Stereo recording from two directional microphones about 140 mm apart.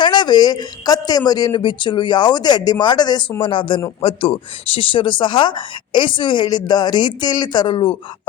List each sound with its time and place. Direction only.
0.0 s speech: 30° left (ahead or behind)